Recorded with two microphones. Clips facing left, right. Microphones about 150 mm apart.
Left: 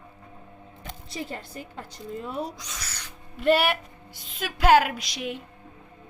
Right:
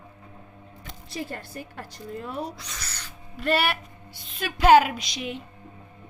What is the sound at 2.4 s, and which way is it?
Owl, 10° left (ahead or behind).